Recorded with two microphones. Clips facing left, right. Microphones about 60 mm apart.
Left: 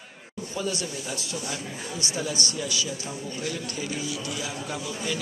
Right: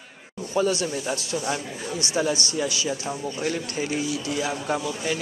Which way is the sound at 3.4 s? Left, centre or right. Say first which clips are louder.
Right 5 dB; right.